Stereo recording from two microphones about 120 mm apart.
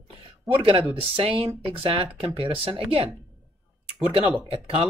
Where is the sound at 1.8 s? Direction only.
50° right (ahead or behind).